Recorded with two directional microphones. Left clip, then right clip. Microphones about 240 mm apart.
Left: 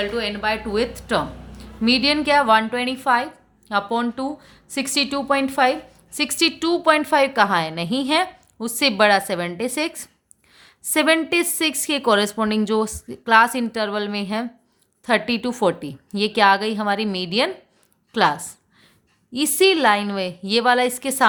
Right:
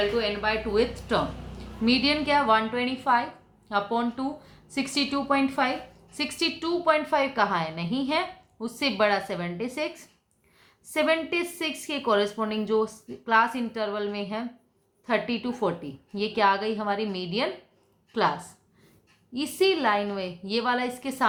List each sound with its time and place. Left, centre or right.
0.1 s a woman's voice: left